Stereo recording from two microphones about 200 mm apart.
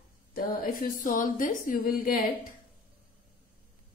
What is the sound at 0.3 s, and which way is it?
A woman's voice, 45° left (ahead or behind).